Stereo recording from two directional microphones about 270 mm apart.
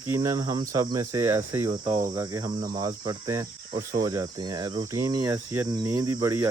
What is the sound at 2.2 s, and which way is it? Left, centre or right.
Cricket, centre.